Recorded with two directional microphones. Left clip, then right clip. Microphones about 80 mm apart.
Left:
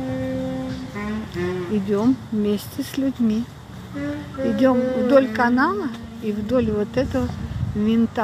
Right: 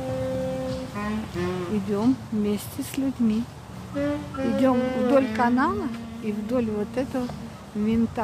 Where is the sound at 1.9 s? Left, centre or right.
Centre.